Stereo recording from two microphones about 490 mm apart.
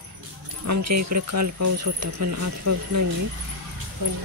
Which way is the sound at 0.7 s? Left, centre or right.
Right.